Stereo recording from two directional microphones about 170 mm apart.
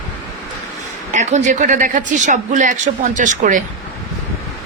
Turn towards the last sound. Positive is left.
turn(degrees=-50)  # may be behind; listen again after turning